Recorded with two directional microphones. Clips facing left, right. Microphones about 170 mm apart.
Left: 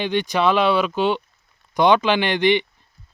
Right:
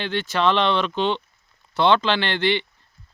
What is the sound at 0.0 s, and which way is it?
Speech, 15° left (ahead or behind).